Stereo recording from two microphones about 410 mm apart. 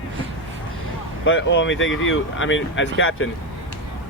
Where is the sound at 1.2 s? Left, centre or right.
Left.